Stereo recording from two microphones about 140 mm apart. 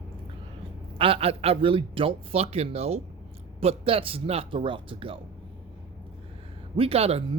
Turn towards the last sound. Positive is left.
turn(degrees=-45)  # may be behind; listen again after turning